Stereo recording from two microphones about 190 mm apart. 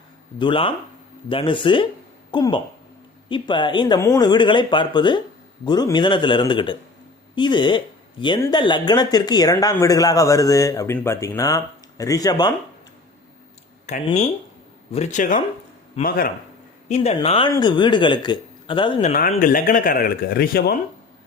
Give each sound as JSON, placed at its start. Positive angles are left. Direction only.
{"t": 0.3, "sound": "speech", "side_deg": 25}
{"t": 13.8, "sound": "a man's voice", "side_deg": 40}
{"t": 16.9, "sound": "speech", "side_deg": 35}
{"t": 19.0, "sound": "a man's voice", "side_deg": 40}